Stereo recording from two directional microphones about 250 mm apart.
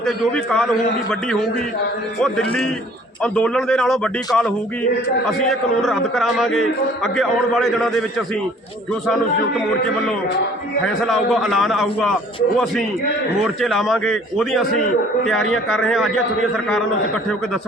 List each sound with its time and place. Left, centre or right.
0.0 s a man's voice: centre
2.2 s a man's voice: centre
11.0 s a man's voice: centre
13.4 s a man's voice: centre